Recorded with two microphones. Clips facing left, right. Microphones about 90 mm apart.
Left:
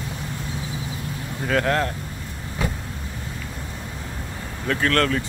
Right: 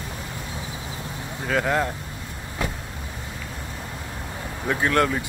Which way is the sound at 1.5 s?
5° right (ahead or behind).